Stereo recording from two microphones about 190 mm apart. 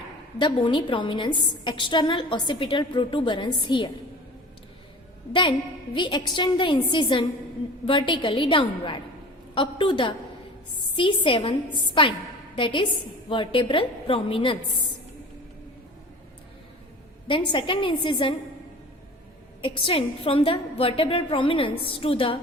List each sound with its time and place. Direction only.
0.3 s a woman's voice: 25° left (ahead or behind)
5.3 s a woman's voice: 25° left (ahead or behind)
17.2 s a woman's voice: 25° left (ahead or behind)
19.6 s a woman's voice: 30° left (ahead or behind)